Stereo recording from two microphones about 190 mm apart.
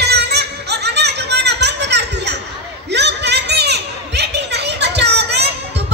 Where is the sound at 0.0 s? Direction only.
60° right (ahead or behind).